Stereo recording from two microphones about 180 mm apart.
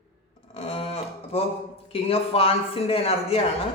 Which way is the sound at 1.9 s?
30° left (ahead or behind).